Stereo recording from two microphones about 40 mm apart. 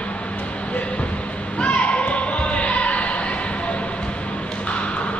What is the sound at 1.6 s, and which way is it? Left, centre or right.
Basketball bounce, left.